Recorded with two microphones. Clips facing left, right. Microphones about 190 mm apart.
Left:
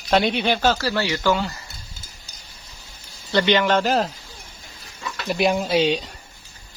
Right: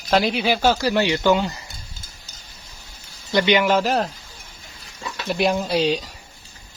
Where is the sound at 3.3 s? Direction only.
15° right (ahead or behind).